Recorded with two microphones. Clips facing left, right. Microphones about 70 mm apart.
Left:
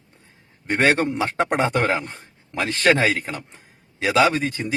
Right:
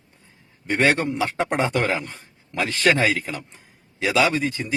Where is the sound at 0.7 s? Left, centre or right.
Left.